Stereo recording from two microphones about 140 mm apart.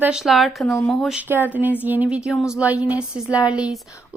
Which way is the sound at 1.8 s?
10° right (ahead or behind).